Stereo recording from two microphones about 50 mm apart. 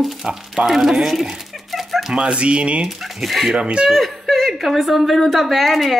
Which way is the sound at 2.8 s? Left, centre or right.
Centre.